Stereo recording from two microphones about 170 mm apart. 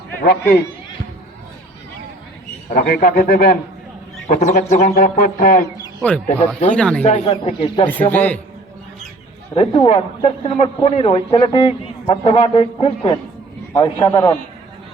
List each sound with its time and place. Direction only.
0.2 s speech: 65° left (ahead or behind)
2.7 s speech: 60° left (ahead or behind)
4.3 s speech: 45° left (ahead or behind)
6.0 s speech: 5° left (ahead or behind)
7.0 s speech: 40° left (ahead or behind)
7.9 s speech: 10° left (ahead or behind)
9.6 s a man's voice: 30° left (ahead or behind)